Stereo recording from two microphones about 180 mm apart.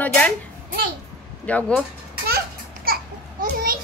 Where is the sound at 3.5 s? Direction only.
55° right (ahead or behind).